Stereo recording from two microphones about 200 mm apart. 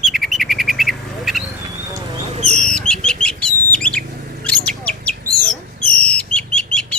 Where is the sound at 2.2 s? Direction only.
35° right (ahead or behind).